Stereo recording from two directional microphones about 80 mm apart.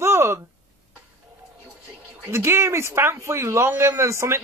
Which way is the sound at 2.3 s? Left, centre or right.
Right.